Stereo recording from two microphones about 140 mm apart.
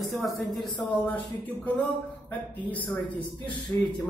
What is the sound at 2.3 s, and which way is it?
A man's voice, 10° left (ahead or behind).